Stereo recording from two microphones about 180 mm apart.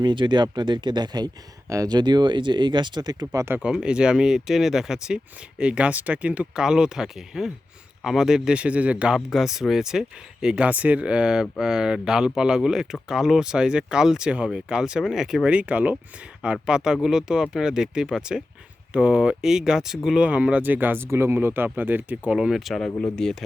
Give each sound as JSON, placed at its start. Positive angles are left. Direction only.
{"t": 0.0, "sound": "speech", "side_deg": -25}